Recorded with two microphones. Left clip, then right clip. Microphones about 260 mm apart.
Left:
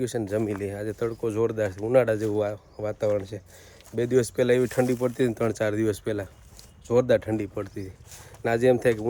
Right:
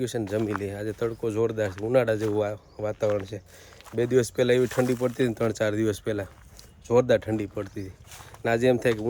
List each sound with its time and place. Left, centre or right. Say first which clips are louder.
0.0 s speech: left 1 dB; centre